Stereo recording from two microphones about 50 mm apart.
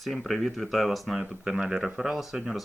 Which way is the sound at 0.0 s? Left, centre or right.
Centre.